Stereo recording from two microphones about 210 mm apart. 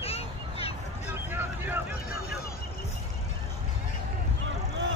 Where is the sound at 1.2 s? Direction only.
10° right (ahead or behind).